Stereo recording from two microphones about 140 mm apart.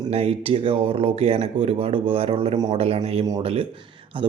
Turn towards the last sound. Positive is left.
turn(degrees=-40)  # may be behind; listen again after turning